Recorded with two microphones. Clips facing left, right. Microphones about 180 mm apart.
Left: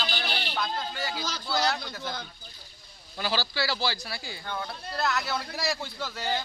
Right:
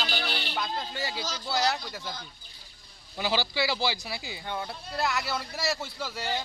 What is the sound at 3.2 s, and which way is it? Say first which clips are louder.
Speech: right 2 dB; 20° right (ahead or behind).